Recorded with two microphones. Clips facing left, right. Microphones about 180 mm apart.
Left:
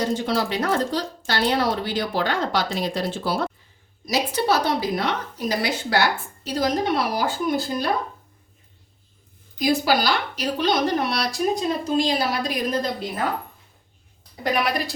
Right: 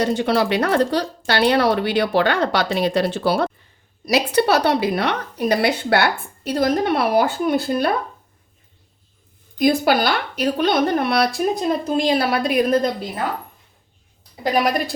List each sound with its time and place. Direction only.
0.0 s a woman's voice: 65° right (ahead or behind)
9.6 s a woman's voice: 55° right (ahead or behind)
14.6 s a woman's voice: 45° right (ahead or behind)